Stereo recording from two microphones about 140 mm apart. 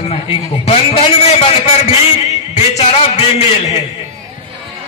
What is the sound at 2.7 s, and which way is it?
Speech, 45° left (ahead or behind).